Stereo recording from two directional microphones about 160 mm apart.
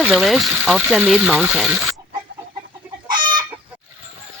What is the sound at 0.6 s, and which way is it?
Speech, 5° right (ahead or behind).